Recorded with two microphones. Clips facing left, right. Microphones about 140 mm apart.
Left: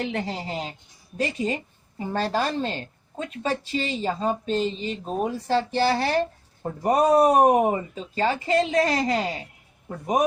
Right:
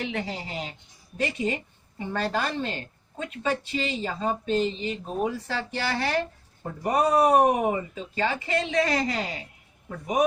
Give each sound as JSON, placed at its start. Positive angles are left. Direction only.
{"t": 0.0, "sound": "a woman's voice", "side_deg": 35}